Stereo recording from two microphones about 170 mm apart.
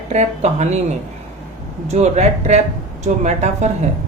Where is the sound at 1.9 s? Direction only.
40° right (ahead or behind).